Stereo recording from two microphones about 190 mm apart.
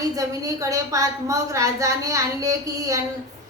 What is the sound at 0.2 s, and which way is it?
A woman's voice, 15° right (ahead or behind).